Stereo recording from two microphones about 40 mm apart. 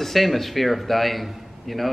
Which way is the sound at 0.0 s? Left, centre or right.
Centre.